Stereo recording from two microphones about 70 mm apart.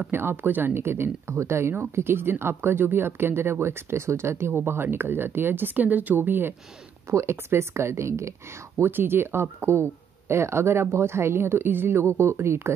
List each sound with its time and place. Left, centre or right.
0.1 s speech: right
7.1 s speech: right